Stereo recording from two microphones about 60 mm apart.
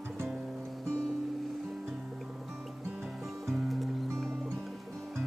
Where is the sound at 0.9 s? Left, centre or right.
Centre.